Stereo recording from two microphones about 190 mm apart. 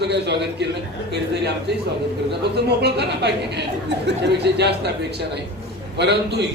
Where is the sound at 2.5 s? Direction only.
60° right (ahead or behind).